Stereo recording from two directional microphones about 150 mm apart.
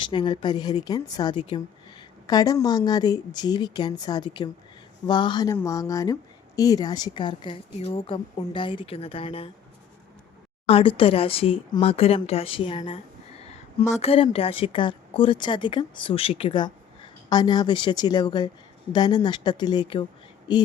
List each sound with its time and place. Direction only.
0.0 s a woman's voice: 30° left (ahead or behind)
10.7 s a woman's voice: 35° left (ahead or behind)